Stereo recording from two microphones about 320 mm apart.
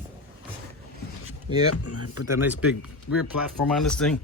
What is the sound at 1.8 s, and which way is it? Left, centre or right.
Speech, left.